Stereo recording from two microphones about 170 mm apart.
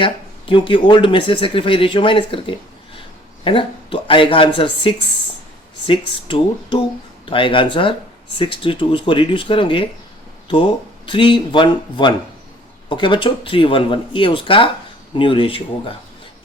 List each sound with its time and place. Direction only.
0.0 s speech: 30° left (ahead or behind)